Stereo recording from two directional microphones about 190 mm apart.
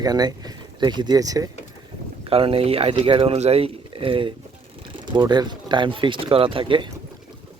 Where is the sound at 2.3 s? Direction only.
30° right (ahead or behind).